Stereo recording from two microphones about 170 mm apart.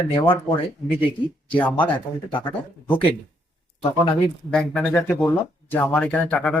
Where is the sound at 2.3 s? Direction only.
30° left (ahead or behind).